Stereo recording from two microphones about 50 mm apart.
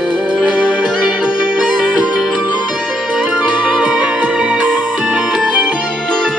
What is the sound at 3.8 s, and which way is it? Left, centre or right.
Music, right.